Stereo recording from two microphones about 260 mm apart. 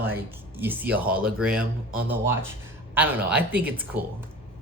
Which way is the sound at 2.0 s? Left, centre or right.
Centre.